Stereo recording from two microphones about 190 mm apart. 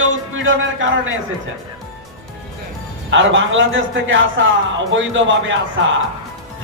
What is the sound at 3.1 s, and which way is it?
A man's voice, 80° right.